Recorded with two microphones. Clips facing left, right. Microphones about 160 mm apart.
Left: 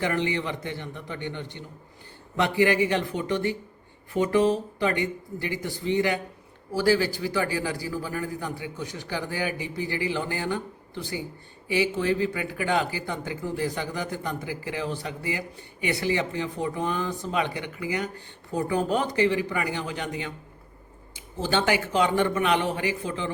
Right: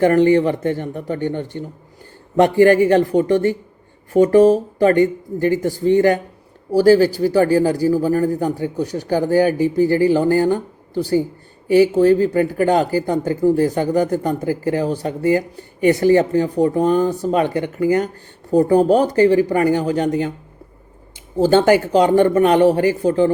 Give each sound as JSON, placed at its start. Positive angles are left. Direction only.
{"t": 0.0, "sound": "speech", "side_deg": -45}
{"t": 21.3, "sound": "a man's voice", "side_deg": -40}